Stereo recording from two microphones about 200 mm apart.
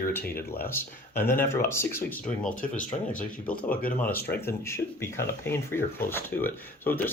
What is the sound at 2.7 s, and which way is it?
Speech, 40° left (ahead or behind).